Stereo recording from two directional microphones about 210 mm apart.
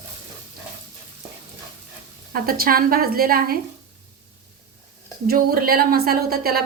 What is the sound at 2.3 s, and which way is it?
A woman's voice, 45° right (ahead or behind).